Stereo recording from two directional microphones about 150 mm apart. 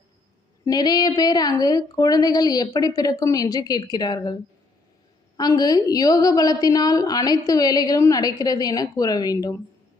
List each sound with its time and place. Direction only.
0.6 s a woman's voice: 25° left (ahead or behind)
5.4 s a woman's voice: 25° left (ahead or behind)